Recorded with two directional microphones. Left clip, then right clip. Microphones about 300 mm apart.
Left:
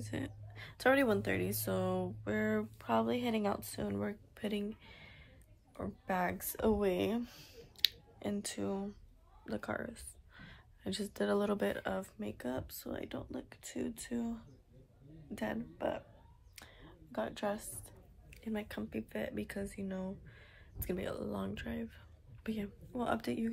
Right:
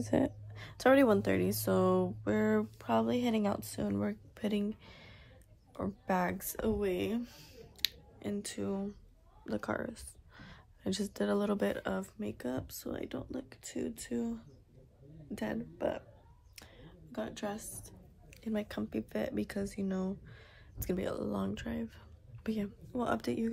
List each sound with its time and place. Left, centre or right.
0.0 s a woman's voice: right
0.6 s speech: centre
9.5 s a sound: centre
11.1 s a woman's voice: centre